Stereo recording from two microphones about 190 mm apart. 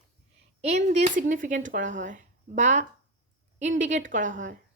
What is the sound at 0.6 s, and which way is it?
A woman's voice, 35° right (ahead or behind).